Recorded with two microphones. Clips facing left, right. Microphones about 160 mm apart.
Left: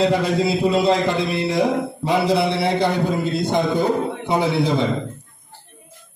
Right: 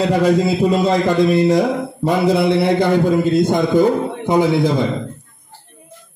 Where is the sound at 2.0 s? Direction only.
50° right (ahead or behind).